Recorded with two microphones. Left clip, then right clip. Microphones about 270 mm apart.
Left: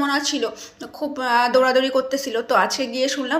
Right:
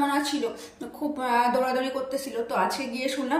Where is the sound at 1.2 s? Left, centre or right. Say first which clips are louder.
Left 6 dB; centre.